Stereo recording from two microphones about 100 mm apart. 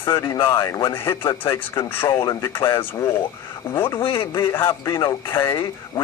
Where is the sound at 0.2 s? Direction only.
35° left (ahead or behind).